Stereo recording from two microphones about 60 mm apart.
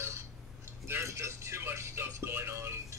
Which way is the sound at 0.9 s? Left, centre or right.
Right.